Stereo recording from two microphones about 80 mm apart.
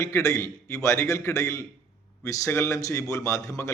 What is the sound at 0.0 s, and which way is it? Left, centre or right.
A man's voice, left.